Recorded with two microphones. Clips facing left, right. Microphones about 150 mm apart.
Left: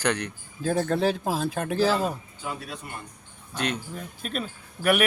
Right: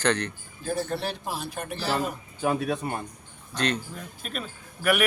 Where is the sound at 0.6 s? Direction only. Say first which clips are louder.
Left 4 dB; 90° left.